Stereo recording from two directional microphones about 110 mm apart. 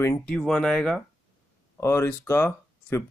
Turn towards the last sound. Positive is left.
turn(degrees=25)  # may be behind; listen again after turning